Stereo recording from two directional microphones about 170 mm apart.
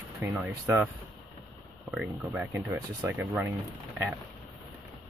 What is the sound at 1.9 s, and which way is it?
Speech, centre (ahead or behind).